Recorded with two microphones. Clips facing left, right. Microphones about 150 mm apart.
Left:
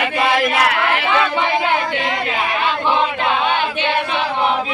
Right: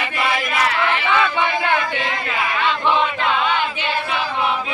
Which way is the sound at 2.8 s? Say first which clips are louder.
Left 1 dB; 20° left (ahead or behind).